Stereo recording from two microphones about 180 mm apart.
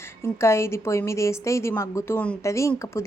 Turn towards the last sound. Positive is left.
turn(degrees=15)  # may be behind; listen again after turning